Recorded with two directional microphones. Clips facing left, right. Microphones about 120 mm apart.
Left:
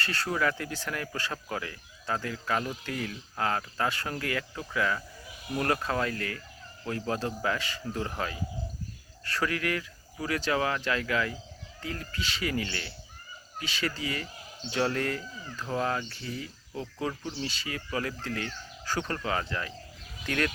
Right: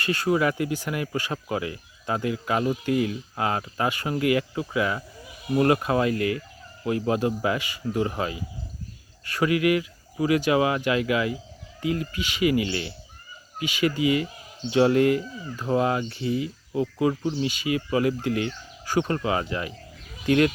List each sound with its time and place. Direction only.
0.0 s speech: 15° right (ahead or behind)